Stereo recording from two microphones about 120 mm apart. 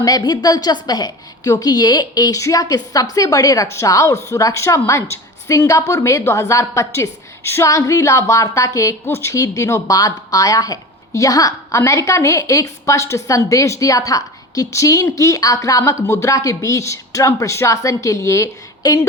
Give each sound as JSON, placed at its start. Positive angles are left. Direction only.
{"t": 0.0, "sound": "a woman's voice", "side_deg": 35}